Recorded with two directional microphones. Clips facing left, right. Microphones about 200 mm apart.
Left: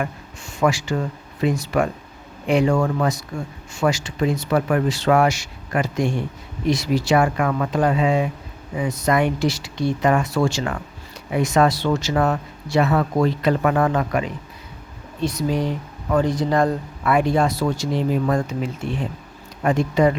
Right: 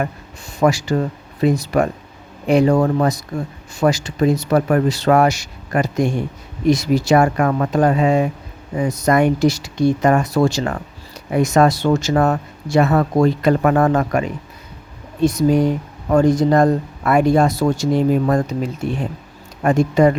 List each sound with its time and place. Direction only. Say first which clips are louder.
0.6 s speech: right 4 dB; 40° right (ahead or behind)